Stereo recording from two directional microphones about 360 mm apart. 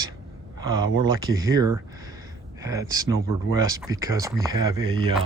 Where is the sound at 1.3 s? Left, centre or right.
Centre.